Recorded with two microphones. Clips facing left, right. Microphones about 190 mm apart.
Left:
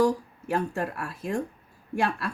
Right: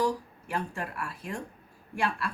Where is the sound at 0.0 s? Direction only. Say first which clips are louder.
Left 6 dB; 40° left (ahead or behind).